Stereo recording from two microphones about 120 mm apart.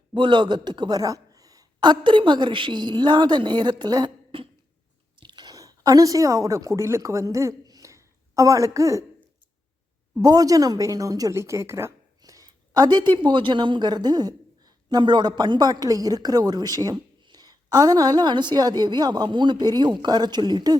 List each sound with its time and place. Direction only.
0.1 s a woman's voice: 40° right (ahead or behind)
10.2 s a woman's voice: 30° right (ahead or behind)